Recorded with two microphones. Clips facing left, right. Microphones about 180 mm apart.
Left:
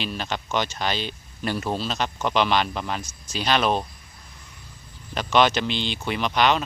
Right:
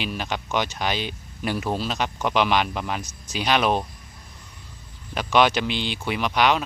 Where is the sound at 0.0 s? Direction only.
10° right (ahead or behind).